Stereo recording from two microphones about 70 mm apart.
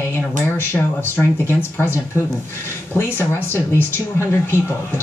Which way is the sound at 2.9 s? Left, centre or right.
Left.